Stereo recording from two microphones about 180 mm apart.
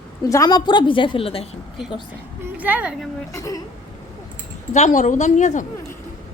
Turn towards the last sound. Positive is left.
turn(degrees=40)  # may be behind; listen again after turning